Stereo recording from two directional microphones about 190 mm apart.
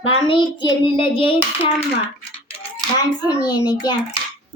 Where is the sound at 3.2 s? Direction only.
20° left (ahead or behind).